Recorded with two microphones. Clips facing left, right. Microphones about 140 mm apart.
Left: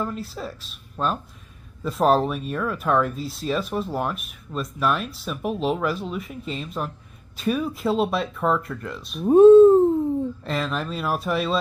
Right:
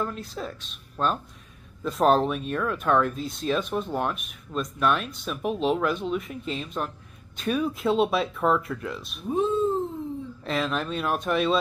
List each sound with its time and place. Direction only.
0.0 s speech: centre (ahead or behind)
9.2 s speech: 50° left (ahead or behind)
10.4 s speech: centre (ahead or behind)